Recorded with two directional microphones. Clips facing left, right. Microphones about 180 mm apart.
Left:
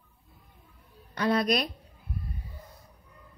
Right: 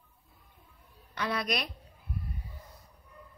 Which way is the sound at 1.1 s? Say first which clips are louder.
Left 7 dB; 40° left (ahead or behind).